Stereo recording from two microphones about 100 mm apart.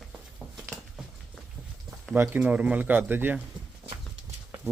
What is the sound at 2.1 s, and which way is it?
Speech, 20° right (ahead or behind).